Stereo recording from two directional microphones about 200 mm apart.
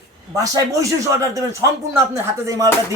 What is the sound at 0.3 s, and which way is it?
Speech, 15° right (ahead or behind).